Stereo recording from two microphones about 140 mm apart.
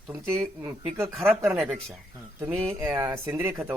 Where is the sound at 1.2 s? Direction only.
15° right (ahead or behind).